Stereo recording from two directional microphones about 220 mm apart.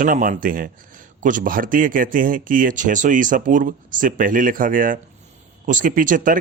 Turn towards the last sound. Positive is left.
turn(degrees=-35)  # may be behind; listen again after turning